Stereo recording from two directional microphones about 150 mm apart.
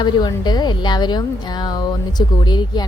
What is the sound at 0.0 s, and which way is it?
Speech, 30° left (ahead or behind).